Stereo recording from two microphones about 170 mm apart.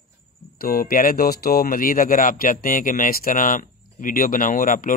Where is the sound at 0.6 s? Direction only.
55° left (ahead or behind).